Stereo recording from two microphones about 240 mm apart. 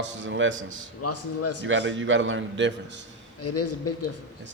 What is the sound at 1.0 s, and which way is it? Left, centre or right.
Speech, left.